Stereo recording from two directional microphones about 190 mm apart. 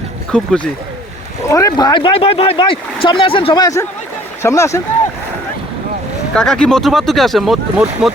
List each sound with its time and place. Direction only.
0.3 s speech: 5° left (ahead or behind)
1.5 s speech: 15° left (ahead or behind)
6.3 s speech: 5° left (ahead or behind)